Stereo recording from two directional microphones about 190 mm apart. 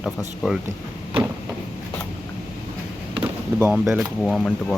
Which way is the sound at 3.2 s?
10° right (ahead or behind).